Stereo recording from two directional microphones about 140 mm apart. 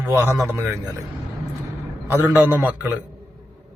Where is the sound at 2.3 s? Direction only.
15° right (ahead or behind).